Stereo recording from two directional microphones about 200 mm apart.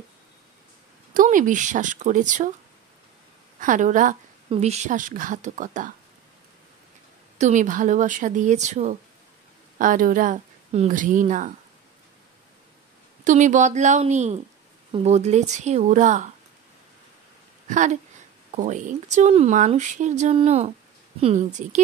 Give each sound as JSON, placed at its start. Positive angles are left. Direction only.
{"t": 1.1, "sound": "speech", "side_deg": -40}
{"t": 3.5, "sound": "speech", "side_deg": -40}
{"t": 7.3, "sound": "speech", "side_deg": -40}
{"t": 13.2, "sound": "speech", "side_deg": -40}
{"t": 17.6, "sound": "speech", "side_deg": -35}